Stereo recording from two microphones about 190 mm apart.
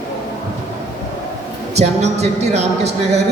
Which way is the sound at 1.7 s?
35° right (ahead or behind).